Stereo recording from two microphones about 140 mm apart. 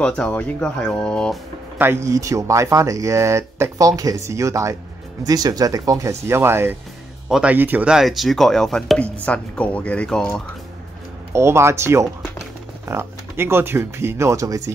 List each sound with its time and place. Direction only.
0.0 s speech: 10° left (ahead or behind)
1.8 s speech: 20° right (ahead or behind); by 10.4 s 5° left (ahead or behind)
11.3 s speech: 20° right (ahead or behind)